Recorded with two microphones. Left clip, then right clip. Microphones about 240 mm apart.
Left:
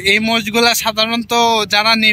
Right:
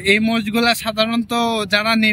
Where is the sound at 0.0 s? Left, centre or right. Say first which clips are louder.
Left 3 dB; centre.